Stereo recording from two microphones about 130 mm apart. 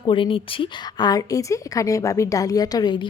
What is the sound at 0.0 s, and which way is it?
A woman's voice, 40° left (ahead or behind).